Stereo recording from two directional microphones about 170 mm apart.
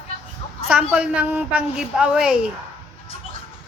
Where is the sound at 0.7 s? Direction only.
5° right (ahead or behind).